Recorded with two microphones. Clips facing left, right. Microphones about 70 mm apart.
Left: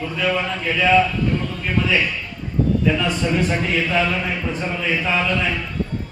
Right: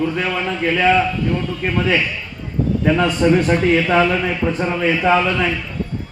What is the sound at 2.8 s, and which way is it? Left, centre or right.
A man's voice, right.